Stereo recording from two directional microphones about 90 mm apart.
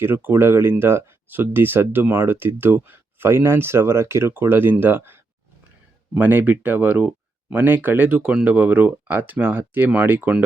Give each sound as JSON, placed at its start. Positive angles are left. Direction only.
{"t": 0.0, "sound": "speech", "side_deg": -25}